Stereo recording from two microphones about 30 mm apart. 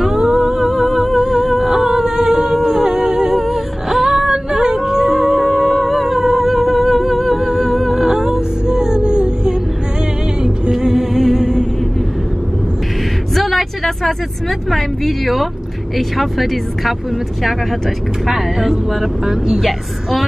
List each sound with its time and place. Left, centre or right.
0.2 s music: right
0.6 s music: centre
1.2 s humming: centre
3.3 s music: centre
4.5 s music: centre
5.4 s humming: centre
7.4 s music: centre; by 9.6 s right
10.7 s music: centre
13.3 s a sound: centre
14.7 s speech: centre
18.2 s speech: centre